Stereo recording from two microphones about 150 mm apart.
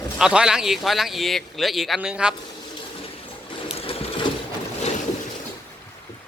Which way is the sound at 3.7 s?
40° left (ahead or behind).